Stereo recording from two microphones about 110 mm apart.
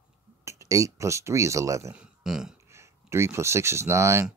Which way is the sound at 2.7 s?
25° right (ahead or behind).